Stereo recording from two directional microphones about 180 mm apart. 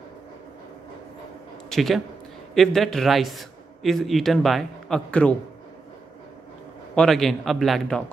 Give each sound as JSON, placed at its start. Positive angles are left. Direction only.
{"t": 1.7, "sound": "a man's voice", "side_deg": 0}
{"t": 7.0, "sound": "a man's voice", "side_deg": 0}